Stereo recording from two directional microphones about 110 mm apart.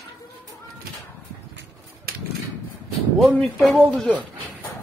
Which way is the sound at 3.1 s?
Centre (ahead or behind).